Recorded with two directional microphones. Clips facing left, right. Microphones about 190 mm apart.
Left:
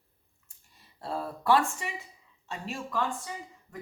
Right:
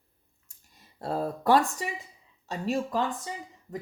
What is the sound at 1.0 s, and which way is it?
Speech, 40° right (ahead or behind).